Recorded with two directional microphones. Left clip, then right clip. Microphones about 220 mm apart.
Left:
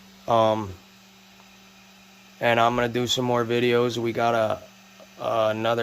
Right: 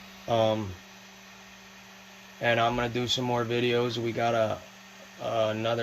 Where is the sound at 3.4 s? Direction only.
15° left (ahead or behind).